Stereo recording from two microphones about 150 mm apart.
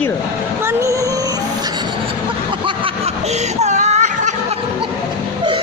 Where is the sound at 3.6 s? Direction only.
50° right (ahead or behind).